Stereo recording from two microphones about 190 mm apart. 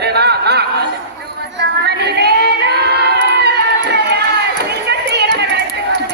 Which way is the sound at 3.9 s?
60° right (ahead or behind).